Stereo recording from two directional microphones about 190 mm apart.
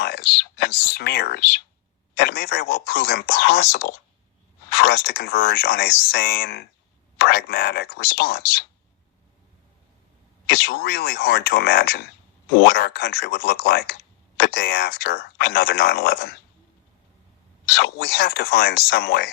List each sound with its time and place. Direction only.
0.0 s whispering: 55° left (ahead or behind)
2.1 s speech: 55° left (ahead or behind)
10.4 s speech: 55° left (ahead or behind)
17.7 s speech: 55° left (ahead or behind)